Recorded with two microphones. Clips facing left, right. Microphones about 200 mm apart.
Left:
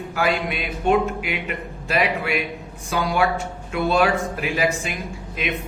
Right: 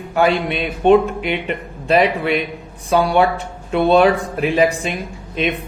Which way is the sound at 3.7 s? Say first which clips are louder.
Right 7 dB; 30° right (ahead or behind).